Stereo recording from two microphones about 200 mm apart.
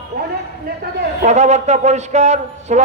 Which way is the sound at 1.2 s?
35° right (ahead or behind).